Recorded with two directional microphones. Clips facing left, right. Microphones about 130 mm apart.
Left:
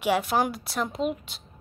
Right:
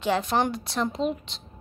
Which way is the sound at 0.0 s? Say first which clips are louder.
Even; 10° left (ahead or behind).